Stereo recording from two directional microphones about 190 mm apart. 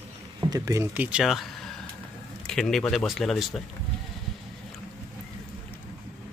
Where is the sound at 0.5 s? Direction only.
15° right (ahead or behind); by 3.6 s centre (ahead or behind).